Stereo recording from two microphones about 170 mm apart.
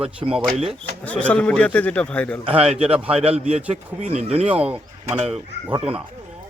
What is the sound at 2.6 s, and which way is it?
Speech, 5° right (ahead or behind).